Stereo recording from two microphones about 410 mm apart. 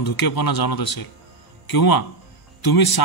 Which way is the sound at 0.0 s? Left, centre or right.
Left.